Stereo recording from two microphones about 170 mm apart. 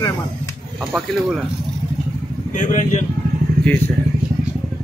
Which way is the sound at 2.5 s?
45° left (ahead or behind).